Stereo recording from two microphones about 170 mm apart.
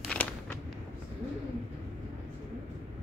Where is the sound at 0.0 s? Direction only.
5° left (ahead or behind).